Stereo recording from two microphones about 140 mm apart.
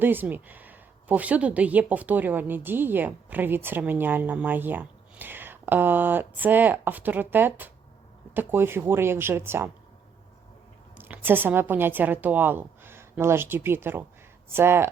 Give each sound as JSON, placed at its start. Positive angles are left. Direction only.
{"t": 0.0, "sound": "speech", "side_deg": -15}
{"t": 10.9, "sound": "a woman's voice", "side_deg": -15}